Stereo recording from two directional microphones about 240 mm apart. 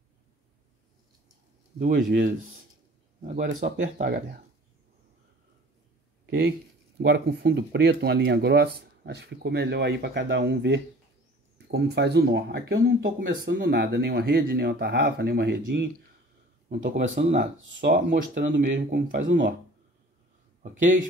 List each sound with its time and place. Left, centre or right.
3.2 s speech: right
7.0 s speech: right
16.9 s speech: right
19.2 s speech: right
20.6 s speech: right